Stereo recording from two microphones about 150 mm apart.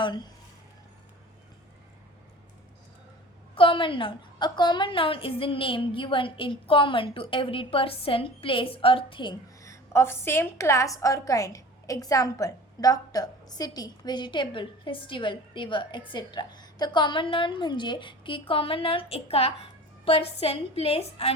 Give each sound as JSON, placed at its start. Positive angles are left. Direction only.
{"t": 3.5, "sound": "a woman's voice", "side_deg": 35}
{"t": 9.6, "sound": "a woman's voice", "side_deg": 20}